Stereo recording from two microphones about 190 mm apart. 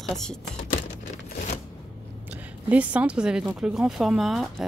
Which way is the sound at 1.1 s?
40° left (ahead or behind).